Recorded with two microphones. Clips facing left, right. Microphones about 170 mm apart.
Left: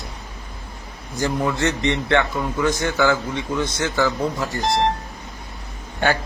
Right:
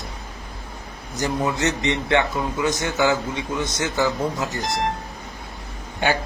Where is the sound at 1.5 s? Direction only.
20° right (ahead or behind).